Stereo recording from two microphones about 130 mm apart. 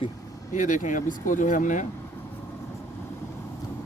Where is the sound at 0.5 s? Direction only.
80° left.